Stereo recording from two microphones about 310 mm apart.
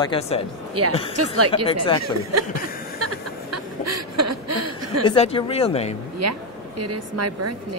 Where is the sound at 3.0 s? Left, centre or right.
Right.